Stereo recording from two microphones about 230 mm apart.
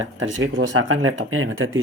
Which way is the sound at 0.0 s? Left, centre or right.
Right.